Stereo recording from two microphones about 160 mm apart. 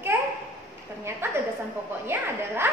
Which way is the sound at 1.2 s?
15° right (ahead or behind).